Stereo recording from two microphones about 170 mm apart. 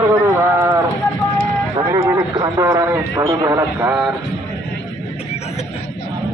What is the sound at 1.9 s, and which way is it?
Speech, 20° right (ahead or behind).